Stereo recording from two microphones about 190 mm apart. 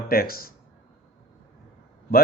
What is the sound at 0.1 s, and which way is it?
Speech, 50° left (ahead or behind).